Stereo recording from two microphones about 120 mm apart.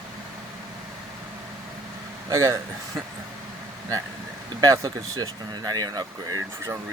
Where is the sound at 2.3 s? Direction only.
25° right (ahead or behind).